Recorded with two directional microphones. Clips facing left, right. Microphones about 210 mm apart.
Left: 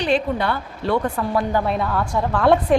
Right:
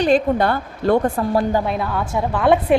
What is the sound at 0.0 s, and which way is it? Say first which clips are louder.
A woman's voice: right 4 dB; 45° right (ahead or behind).